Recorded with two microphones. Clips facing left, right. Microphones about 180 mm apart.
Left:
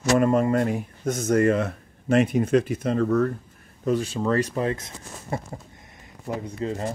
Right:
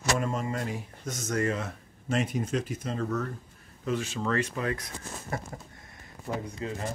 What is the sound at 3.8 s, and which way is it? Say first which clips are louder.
Speech: left 7 dB; 35° left (ahead or behind).